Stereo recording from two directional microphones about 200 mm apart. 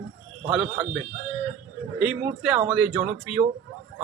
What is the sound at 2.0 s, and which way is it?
Speech, 5° right (ahead or behind).